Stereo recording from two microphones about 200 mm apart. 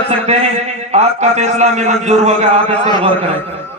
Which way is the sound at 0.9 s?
35° right (ahead or behind).